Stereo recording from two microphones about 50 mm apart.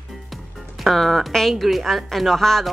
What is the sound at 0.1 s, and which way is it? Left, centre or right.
Music, centre.